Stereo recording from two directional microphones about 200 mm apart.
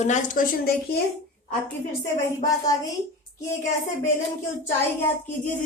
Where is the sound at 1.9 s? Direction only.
15° left (ahead or behind).